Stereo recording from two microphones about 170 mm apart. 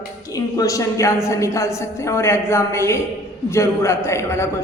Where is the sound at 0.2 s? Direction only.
20° left (ahead or behind).